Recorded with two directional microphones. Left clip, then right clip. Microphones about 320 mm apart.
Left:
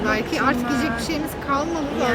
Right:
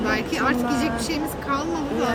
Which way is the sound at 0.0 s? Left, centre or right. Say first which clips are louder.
Left 2 dB; centre.